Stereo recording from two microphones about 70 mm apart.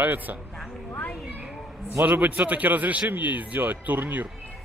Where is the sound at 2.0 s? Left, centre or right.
Right.